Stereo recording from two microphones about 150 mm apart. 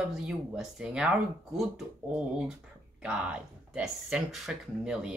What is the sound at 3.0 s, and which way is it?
Speech, 5° right (ahead or behind).